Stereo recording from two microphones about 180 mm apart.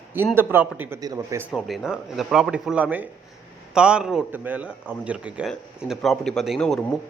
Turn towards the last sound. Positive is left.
turn(degrees=5)  # may be behind; listen again after turning